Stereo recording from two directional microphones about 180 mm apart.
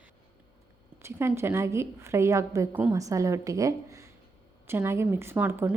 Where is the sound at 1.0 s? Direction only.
15° right (ahead or behind).